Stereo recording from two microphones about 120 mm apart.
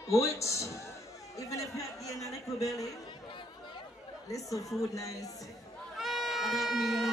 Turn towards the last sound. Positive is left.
turn(degrees=0)  # may be behind; listen again after turning